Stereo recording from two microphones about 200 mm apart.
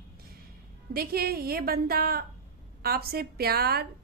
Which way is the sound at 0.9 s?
50° right (ahead or behind).